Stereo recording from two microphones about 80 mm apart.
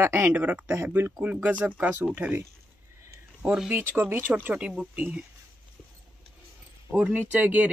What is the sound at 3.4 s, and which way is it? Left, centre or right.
Speech, centre.